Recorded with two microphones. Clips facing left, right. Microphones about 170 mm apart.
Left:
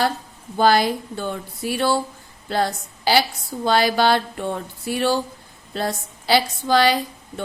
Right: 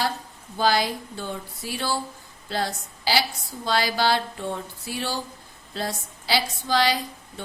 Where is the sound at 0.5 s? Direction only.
55° left (ahead or behind).